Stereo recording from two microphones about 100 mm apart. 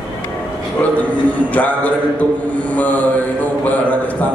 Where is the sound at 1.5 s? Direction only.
15° left (ahead or behind).